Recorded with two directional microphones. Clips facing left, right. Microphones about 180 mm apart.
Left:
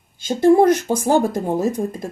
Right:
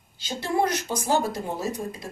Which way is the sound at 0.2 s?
50° left (ahead or behind).